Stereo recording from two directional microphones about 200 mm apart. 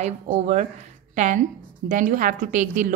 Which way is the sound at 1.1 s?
40° right (ahead or behind).